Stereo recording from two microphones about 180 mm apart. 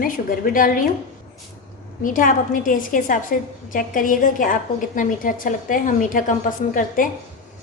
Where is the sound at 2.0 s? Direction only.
50° left (ahead or behind).